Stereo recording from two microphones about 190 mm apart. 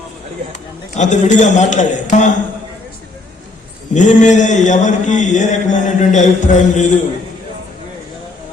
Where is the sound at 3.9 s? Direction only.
40° left (ahead or behind).